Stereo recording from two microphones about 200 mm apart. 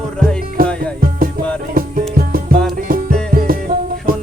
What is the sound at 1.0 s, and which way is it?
Music, 45° right (ahead or behind).